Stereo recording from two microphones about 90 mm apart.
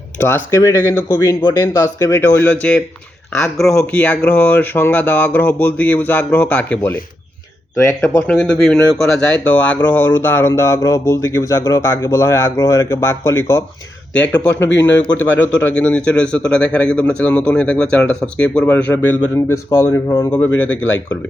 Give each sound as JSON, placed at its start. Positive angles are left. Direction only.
{"t": 0.2, "sound": "speech", "side_deg": 30}
{"t": 2.6, "sound": "speech", "side_deg": 10}
{"t": 8.0, "sound": "speech", "side_deg": 10}
{"t": 10.5, "sound": "speech", "side_deg": 35}